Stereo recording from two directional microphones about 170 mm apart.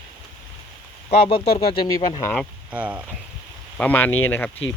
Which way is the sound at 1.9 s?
20° left (ahead or behind).